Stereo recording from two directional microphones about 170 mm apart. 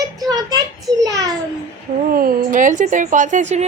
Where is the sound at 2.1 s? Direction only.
55° right (ahead or behind).